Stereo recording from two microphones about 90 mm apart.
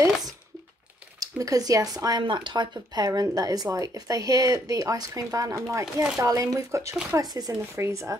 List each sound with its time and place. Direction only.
1.2 s speech: 40° right (ahead or behind)
2.1 s speech: 60° right (ahead or behind); by 8.2 s 30° right (ahead or behind)